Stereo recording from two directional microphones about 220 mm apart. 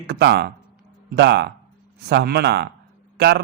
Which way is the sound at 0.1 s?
50° right (ahead or behind).